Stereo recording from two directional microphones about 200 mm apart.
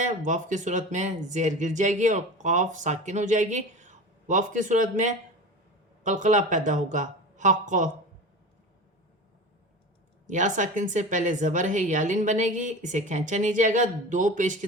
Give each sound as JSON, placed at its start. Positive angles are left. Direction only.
{"t": 0.0, "sound": "speech", "side_deg": -40}
{"t": 10.2, "sound": "speech", "side_deg": -40}